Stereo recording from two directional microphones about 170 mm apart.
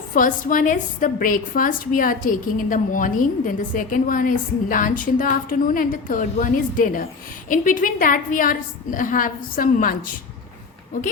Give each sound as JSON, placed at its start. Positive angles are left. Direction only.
{"t": 0.1, "sound": "a woman's voice", "side_deg": 50}